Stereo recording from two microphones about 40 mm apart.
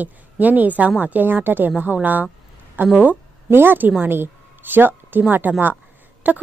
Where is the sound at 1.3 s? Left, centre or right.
Right.